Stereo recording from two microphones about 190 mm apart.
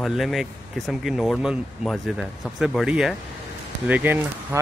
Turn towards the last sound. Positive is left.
turn(degrees=-10)  # may be behind; listen again after turning